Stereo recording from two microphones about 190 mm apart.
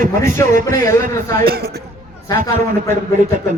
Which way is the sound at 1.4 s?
55° right (ahead or behind).